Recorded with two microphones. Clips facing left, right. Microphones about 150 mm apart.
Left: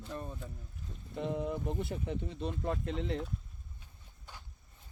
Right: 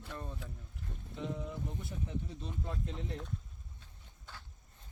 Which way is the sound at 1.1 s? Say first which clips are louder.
Left 6 dB; 60° left (ahead or behind).